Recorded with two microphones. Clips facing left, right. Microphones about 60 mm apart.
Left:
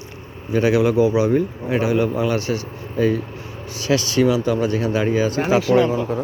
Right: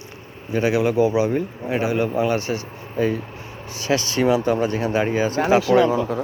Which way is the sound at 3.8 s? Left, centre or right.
Right.